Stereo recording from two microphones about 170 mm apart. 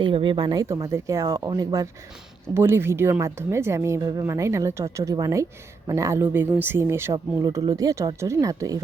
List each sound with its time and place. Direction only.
0.0 s speech: 30° right (ahead or behind)